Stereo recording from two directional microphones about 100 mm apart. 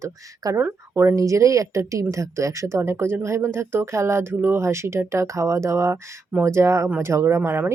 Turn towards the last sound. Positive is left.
turn(degrees=-20)  # may be behind; listen again after turning